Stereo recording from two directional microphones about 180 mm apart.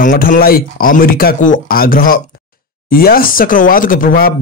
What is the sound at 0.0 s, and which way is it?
Speech, 50° left (ahead or behind).